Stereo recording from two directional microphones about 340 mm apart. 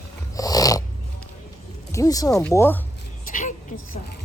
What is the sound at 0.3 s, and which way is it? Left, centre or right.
Dog, centre.